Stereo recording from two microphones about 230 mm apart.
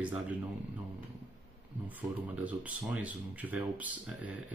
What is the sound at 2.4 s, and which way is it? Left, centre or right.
Speech, centre.